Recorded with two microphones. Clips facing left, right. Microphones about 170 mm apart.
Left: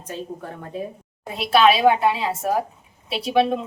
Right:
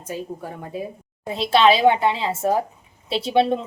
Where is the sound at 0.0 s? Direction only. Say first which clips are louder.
Right 1 dB; 10° right (ahead or behind).